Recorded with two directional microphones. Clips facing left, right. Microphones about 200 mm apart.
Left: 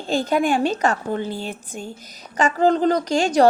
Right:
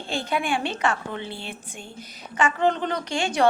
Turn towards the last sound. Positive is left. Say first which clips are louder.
# left 7 dB
turn(degrees=40)  # may be behind; listen again after turning